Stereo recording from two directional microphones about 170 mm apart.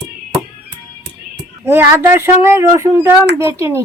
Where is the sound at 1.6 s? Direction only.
15° right (ahead or behind).